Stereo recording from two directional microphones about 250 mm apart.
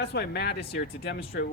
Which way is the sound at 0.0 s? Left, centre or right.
Left.